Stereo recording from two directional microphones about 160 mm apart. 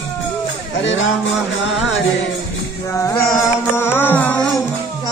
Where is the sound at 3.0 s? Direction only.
15° left (ahead or behind).